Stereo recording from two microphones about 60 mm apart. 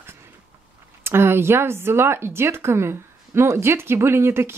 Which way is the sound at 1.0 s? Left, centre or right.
Right.